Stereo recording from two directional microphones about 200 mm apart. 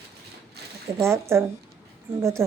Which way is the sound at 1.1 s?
10° right (ahead or behind).